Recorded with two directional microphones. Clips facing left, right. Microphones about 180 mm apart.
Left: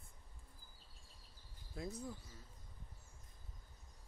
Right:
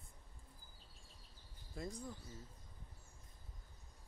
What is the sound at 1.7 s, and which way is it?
Speech, centre (ahead or behind).